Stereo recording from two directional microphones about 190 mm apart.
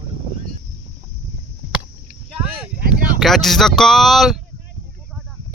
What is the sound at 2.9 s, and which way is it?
Speech, centre (ahead or behind).